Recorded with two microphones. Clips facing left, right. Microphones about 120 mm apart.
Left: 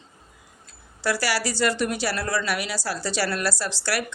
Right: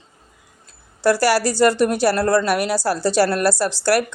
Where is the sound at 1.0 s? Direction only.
50° right (ahead or behind).